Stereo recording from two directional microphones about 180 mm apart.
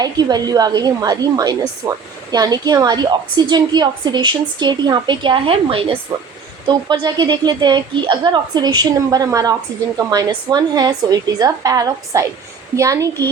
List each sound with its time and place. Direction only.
0.0 s a woman's voice: 20° right (ahead or behind)